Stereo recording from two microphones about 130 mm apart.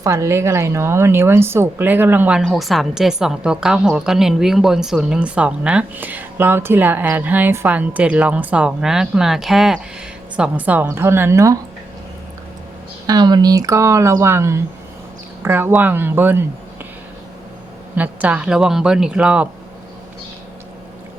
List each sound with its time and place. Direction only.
0.0 s a woman's voice: 25° right (ahead or behind)
2.4 s a woman's voice: centre (ahead or behind); by 11.6 s 25° right (ahead or behind)
13.1 s a woman's voice: 30° right (ahead or behind); by 16.5 s 15° right (ahead or behind)
17.9 s a woman's voice: 10° right (ahead or behind)